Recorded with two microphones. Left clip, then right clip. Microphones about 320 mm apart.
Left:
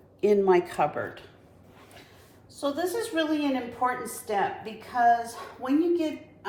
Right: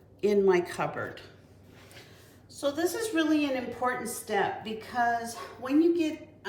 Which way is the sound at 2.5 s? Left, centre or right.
Centre.